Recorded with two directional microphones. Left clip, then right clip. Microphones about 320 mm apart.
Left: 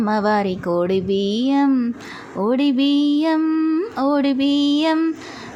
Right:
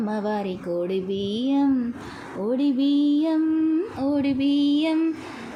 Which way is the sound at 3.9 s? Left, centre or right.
Left.